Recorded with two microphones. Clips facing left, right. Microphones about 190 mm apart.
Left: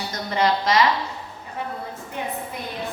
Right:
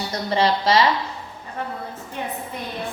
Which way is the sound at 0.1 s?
30° right (ahead or behind).